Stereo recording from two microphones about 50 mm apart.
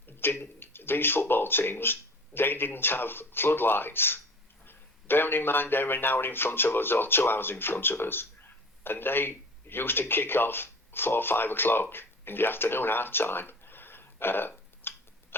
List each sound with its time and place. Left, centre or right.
0.2 s speech: left